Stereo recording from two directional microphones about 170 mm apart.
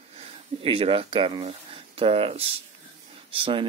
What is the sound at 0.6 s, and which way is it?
Speech, 35° right (ahead or behind).